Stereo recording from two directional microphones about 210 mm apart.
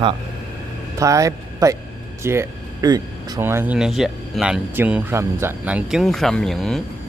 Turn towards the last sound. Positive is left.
turn(degrees=0)  # may be behind; listen again after turning